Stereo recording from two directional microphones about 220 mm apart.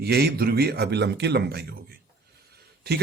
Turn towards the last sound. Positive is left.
turn(degrees=-45)  # may be behind; listen again after turning